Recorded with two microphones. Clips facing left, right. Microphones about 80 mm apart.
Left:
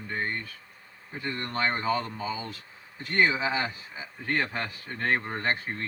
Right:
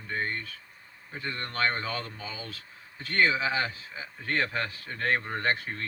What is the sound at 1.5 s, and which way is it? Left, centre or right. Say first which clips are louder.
Speech: left 3 dB; centre.